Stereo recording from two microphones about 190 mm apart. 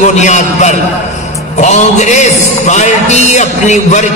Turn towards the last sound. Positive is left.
turn(degrees=40)  # may be behind; listen again after turning